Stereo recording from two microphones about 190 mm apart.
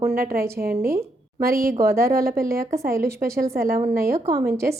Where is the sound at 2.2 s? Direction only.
50° right (ahead or behind).